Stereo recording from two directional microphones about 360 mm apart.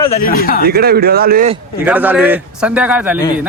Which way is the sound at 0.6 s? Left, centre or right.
Right.